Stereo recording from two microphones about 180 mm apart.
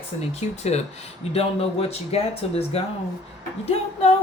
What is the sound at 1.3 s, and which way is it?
Speech, 35° left (ahead or behind).